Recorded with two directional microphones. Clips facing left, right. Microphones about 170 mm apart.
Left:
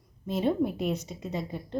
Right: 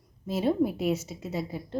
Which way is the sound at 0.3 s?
5° right (ahead or behind).